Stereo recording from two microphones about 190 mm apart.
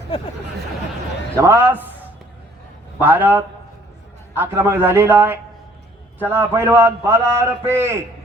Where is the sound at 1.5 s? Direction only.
10° right (ahead or behind).